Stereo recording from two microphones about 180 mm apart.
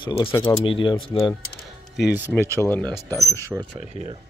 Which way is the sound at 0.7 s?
30° left (ahead or behind).